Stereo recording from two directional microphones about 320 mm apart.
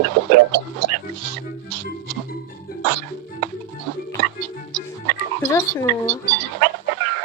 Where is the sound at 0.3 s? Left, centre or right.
Right.